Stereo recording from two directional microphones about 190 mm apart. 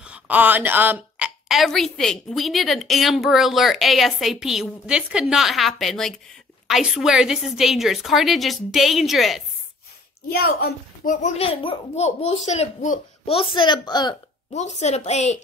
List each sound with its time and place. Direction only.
0.0 s a woman's voice: 5° right (ahead or behind)
10.3 s a woman's voice: 50° left (ahead or behind)
11.2 s a child's voice: 30° left (ahead or behind)
14.5 s a child's voice: 35° left (ahead or behind)